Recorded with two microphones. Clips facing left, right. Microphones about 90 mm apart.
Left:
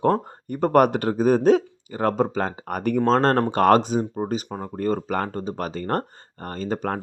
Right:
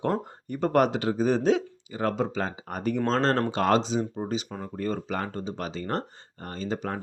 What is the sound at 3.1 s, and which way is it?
Speech, 45° left (ahead or behind).